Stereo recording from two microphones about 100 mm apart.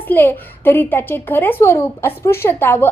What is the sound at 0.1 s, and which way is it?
A woman's voice, 20° left (ahead or behind).